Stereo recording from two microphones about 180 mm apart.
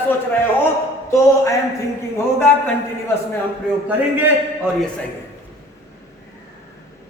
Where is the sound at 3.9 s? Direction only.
10° right (ahead or behind).